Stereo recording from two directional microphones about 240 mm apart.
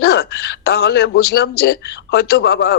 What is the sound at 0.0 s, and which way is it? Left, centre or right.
A man's voice, left.